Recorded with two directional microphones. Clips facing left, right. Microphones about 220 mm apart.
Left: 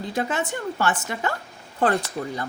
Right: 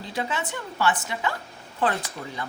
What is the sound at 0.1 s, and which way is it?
Speech, 45° left (ahead or behind).